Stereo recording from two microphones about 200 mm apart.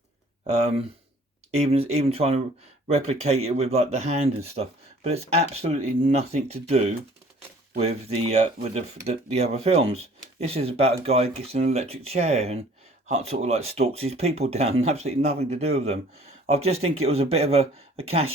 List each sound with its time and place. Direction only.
0.4 s speech: 30° right (ahead or behind)